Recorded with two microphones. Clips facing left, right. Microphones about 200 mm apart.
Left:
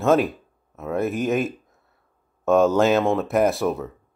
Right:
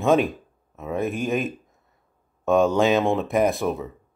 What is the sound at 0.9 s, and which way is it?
Speech, 15° right (ahead or behind).